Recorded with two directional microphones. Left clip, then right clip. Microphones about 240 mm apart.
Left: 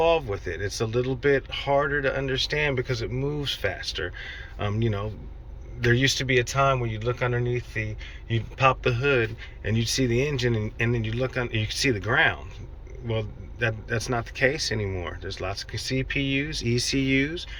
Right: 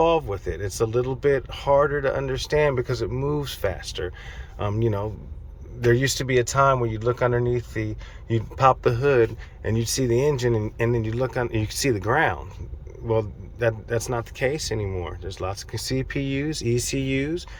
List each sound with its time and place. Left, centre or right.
0.0 s speech: centre